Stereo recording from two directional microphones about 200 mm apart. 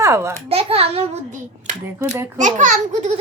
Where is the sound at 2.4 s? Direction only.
40° right (ahead or behind).